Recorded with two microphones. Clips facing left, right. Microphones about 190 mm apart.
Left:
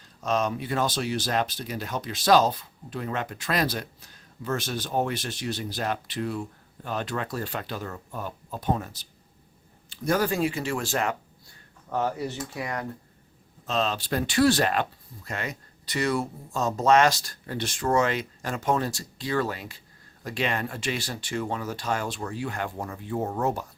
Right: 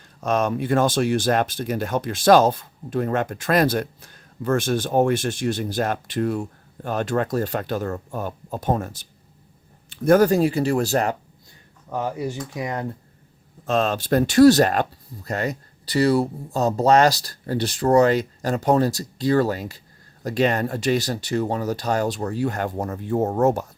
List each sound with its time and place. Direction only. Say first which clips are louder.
0.2 s speech: right 5 dB; 55° right (ahead or behind); by 11.2 s 35° right (ahead or behind)
11.9 s speech: right 2 dB; 10° right (ahead or behind)
13.7 s speech: right 6 dB; 50° right (ahead or behind)